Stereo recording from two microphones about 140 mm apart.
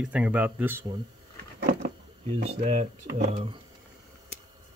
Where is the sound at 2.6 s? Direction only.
55° right (ahead or behind).